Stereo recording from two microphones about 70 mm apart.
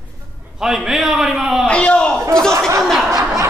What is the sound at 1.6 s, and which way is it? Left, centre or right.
Speech, centre.